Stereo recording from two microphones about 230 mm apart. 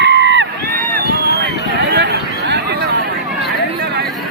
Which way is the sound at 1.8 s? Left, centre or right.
Right.